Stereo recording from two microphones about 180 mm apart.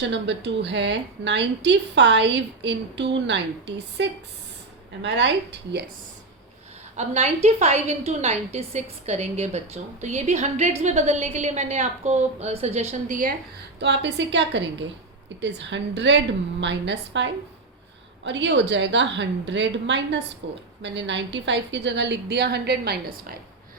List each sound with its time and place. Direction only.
0.1 s a woman's voice: 75° right (ahead or behind)
5.0 s a woman's voice: 75° right (ahead or behind)
6.9 s a woman's voice: 40° right (ahead or behind)
13.7 s a woman's voice: 75° right (ahead or behind)